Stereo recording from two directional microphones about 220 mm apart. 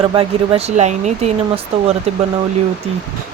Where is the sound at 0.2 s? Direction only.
30° right (ahead or behind).